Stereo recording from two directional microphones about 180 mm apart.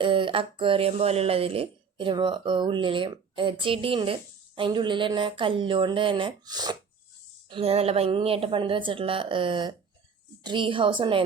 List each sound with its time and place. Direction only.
0.0 s speech: 30° right (ahead or behind)
7.5 s speech: 35° right (ahead or behind)